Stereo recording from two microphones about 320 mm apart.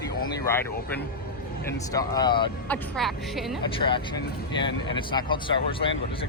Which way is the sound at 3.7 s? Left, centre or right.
Centre.